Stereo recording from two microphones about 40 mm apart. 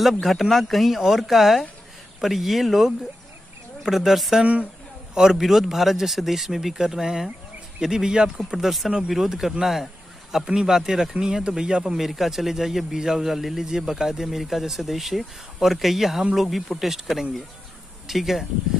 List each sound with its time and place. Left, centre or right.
0.0 s a man's voice: centre
5.1 s a man's voice: centre
5.4 s a man's voice: centre
12.0 s a man's voice: centre